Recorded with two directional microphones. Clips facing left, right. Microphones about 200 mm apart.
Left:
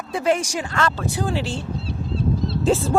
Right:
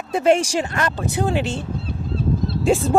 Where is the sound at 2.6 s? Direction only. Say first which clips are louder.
Right 2 dB; 15° right (ahead or behind).